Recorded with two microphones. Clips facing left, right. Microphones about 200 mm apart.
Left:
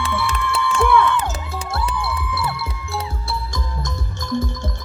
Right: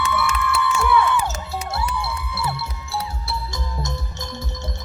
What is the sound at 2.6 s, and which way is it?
Music, 55° left (ahead or behind).